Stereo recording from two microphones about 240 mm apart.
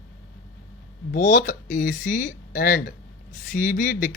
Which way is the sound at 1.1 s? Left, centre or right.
Left.